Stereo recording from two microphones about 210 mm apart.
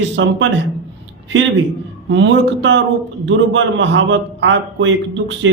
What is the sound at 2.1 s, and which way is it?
A man's voice, 60° right (ahead or behind).